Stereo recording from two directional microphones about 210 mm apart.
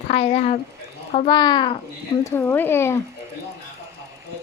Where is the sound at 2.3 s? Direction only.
10° left (ahead or behind).